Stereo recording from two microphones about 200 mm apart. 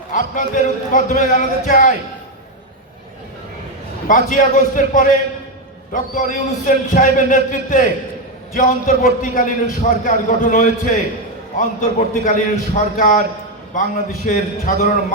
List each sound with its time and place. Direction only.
0.1 s a man's voice: 40° left (ahead or behind)
4.1 s a man's voice: 40° left (ahead or behind)
14.3 s a man's voice: 45° left (ahead or behind)